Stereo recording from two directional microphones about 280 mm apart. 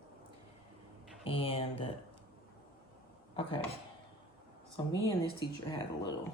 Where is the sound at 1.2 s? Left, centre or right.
Centre.